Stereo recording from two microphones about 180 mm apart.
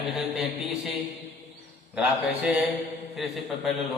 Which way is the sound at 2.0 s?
5° right (ahead or behind).